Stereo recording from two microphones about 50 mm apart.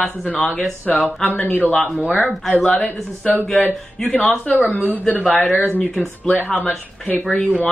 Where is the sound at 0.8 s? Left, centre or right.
Left.